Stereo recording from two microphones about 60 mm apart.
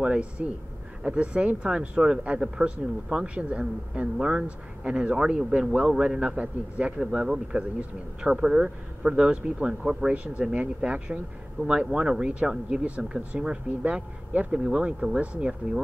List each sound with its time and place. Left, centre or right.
0.0 s speech: centre